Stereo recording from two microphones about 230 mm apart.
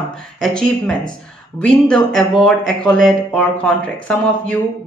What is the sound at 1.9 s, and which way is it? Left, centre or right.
Speech, centre.